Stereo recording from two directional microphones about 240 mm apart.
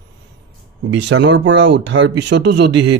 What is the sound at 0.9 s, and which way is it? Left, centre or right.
Speech, right.